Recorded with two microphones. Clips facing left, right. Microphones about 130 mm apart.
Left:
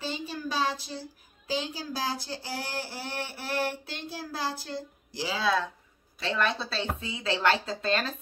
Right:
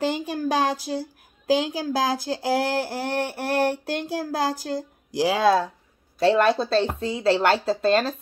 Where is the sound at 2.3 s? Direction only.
65° right (ahead or behind).